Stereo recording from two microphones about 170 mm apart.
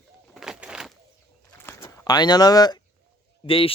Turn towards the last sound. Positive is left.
turn(degrees=30)  # may be behind; listen again after turning